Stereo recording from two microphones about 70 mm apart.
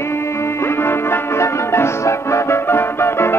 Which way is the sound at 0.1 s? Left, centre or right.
Left.